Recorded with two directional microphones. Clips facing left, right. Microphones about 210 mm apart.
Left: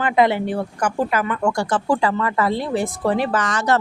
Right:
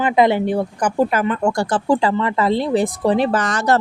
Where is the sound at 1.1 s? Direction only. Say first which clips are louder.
Right 2 dB; 30° right (ahead or behind).